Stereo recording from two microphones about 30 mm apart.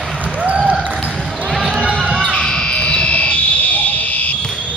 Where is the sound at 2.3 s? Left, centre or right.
Left.